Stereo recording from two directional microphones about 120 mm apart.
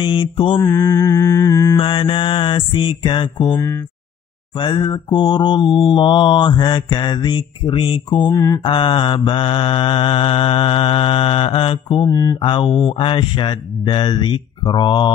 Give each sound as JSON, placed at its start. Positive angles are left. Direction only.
{"t": 0.0, "sound": "mantra", "side_deg": 45}
{"t": 0.7, "sound": "mantra", "side_deg": 25}
{"t": 1.8, "sound": "mantra", "side_deg": 45}
{"t": 4.6, "sound": "mantra", "side_deg": 40}
{"t": 8.3, "sound": "mantra", "side_deg": 30}
{"t": 8.6, "sound": "mantra", "side_deg": 45}
{"t": 12.1, "sound": "mantra", "side_deg": 25}
{"t": 12.4, "sound": "mantra", "side_deg": 40}